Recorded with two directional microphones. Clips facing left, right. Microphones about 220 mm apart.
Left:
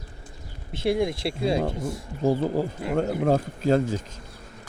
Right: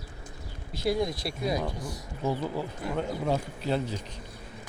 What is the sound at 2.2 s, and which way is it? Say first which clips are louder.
Speech: left 7 dB; 45° left (ahead or behind).